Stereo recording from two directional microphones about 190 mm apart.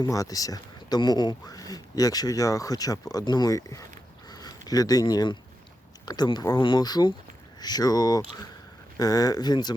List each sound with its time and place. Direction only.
0.0 s speech: 20° left (ahead or behind)
4.3 s a sound: 20° left (ahead or behind)
6.1 s speech: 20° left (ahead or behind)